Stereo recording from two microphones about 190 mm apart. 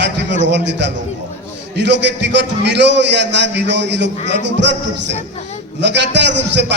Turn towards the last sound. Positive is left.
turn(degrees=-65)  # may be behind; listen again after turning